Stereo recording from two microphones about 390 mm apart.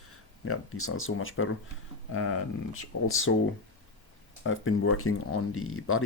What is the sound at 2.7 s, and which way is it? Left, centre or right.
Speech, left.